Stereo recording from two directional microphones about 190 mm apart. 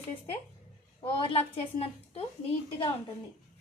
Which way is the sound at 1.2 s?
30° left (ahead or behind).